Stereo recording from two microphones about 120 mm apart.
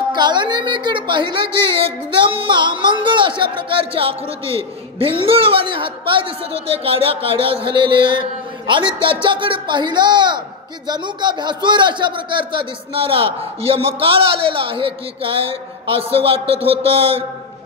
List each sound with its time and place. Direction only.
0.1 s a man's voice: 40° right (ahead or behind)